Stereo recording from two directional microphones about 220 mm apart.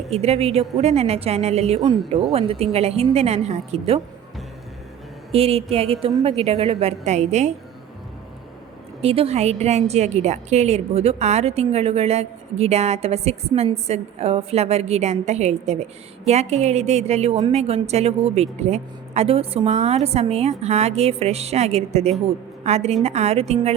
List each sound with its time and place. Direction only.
0.1 s a woman's voice: 30° right (ahead or behind)
5.3 s a woman's voice: 25° right (ahead or behind)
9.0 s a woman's voice: 25° right (ahead or behind)